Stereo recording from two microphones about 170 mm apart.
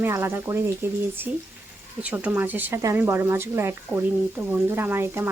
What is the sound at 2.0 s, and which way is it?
Speech, 10° right (ahead or behind).